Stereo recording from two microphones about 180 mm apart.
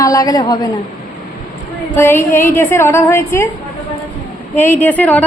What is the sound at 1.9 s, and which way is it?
A woman's voice, 15° left (ahead or behind).